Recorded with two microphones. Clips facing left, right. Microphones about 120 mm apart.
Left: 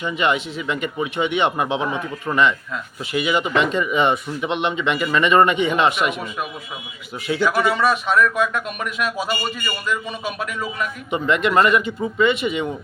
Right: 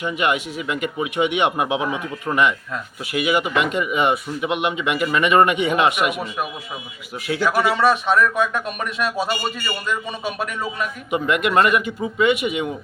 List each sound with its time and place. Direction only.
0.0 s speech: 10° right (ahead or behind)
7.3 s speech: 10° right (ahead or behind)
7.8 s speech: 25° right (ahead or behind)
11.1 s speech: 10° right (ahead or behind)